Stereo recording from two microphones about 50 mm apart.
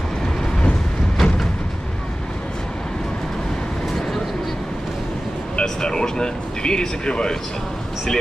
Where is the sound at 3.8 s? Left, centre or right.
Centre.